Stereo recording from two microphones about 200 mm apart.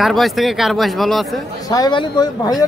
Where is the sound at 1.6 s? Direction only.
20° left (ahead or behind).